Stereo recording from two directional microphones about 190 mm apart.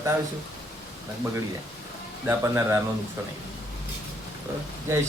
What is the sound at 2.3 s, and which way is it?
Speech, 15° right (ahead or behind).